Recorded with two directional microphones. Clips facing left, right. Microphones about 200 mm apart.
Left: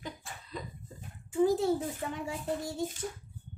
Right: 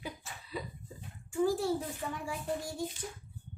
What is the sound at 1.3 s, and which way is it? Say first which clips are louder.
A child's voice: left 3 dB; 20° left (ahead or behind).